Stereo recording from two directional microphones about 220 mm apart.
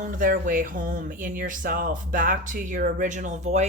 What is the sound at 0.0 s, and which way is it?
A woman's voice, 35° right (ahead or behind).